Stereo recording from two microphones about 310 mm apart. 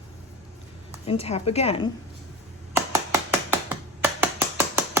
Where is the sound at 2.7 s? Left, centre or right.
Centre.